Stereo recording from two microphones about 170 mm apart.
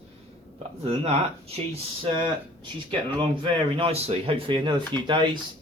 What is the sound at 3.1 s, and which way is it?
Speech, 30° right (ahead or behind).